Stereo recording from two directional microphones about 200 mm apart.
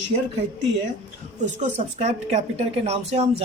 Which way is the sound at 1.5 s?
35° right (ahead or behind).